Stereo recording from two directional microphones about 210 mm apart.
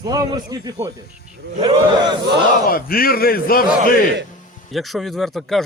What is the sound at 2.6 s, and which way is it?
A man's voice, 45° left (ahead or behind).